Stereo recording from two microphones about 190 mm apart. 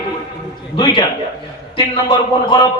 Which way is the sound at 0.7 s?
25° left (ahead or behind).